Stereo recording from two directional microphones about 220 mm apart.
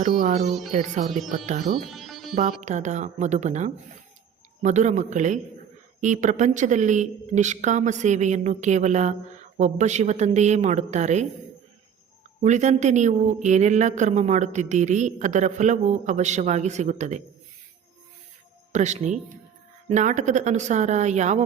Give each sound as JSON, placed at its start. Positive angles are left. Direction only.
{"t": 0.0, "sound": "music", "side_deg": -40}
{"t": 0.4, "sound": "speech", "side_deg": 0}
{"t": 0.7, "sound": "a woman's voice", "side_deg": -35}
{"t": 1.1, "sound": "speech", "side_deg": 0}
{"t": 1.5, "sound": "a woman's voice", "side_deg": -35}
{"t": 1.9, "sound": "music", "side_deg": 0}
{"t": 2.3, "sound": "a woman's voice", "side_deg": -35}
{"t": 12.4, "sound": "a woman's voice", "side_deg": -30}
{"t": 18.7, "sound": "a woman's voice", "side_deg": -30}